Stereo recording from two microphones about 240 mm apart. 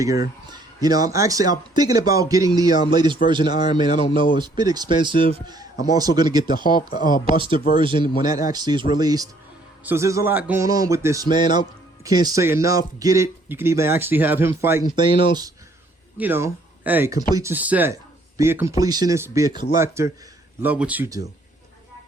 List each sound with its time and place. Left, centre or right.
0.0 s speech: centre
6.7 s speech: left
7.3 s speech: right
16.1 s speech: centre